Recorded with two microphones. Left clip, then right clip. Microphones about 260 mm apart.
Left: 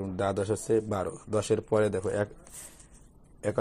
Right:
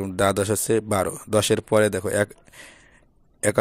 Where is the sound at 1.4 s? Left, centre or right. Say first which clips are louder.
Right 5 dB; right.